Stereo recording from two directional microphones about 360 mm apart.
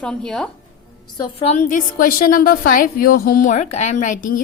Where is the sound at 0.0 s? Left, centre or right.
Centre.